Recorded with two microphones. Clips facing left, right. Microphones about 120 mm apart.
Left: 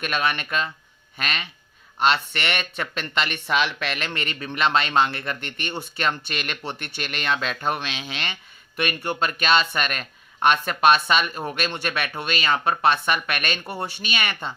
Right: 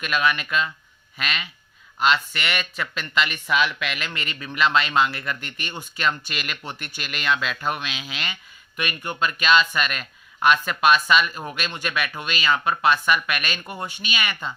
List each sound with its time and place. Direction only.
0.0 s speech: 35° left (ahead or behind)
2.9 s speech: 50° left (ahead or behind)
3.2 s speech: 35° left (ahead or behind)